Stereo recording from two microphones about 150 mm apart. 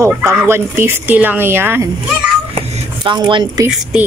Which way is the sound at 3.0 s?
30° right (ahead or behind).